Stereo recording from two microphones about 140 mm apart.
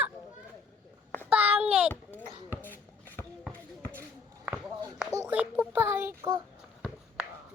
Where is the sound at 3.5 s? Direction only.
10° left (ahead or behind).